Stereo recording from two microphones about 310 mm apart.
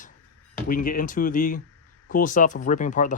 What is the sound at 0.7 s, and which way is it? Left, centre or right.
Speech, left.